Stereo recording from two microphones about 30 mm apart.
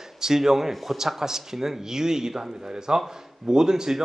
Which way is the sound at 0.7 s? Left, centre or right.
Centre.